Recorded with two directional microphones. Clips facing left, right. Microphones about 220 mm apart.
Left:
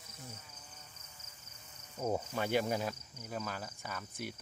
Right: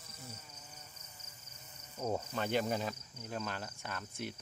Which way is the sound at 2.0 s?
10° left (ahead or behind).